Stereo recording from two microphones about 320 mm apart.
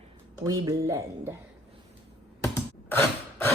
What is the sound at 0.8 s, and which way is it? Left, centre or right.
Music, centre.